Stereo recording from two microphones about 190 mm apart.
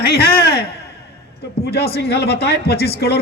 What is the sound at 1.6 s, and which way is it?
A man's voice, 55° left (ahead or behind).